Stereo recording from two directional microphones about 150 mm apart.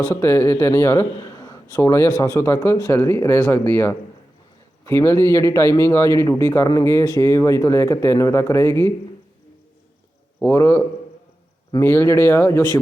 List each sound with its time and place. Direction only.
0.1 s a man's voice: 15° left (ahead or behind)
10.4 s a man's voice: 15° left (ahead or behind)